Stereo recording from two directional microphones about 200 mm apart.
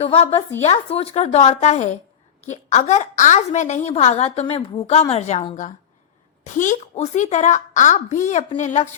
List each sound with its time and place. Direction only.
0.0 s a woman's voice: 30° left (ahead or behind)